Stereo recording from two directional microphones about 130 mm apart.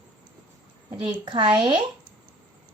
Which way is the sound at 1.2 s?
35° right (ahead or behind).